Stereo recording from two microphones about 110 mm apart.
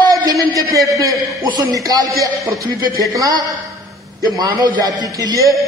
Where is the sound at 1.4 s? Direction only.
35° right (ahead or behind).